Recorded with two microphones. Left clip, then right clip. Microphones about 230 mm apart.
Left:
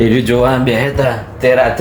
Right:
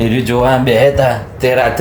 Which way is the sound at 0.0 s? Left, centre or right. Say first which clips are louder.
Left 1 dB; centre.